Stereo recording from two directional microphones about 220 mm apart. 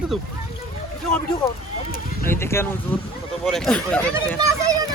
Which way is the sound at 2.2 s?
10° left (ahead or behind).